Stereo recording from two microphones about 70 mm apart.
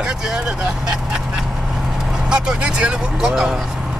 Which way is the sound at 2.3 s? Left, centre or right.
Centre.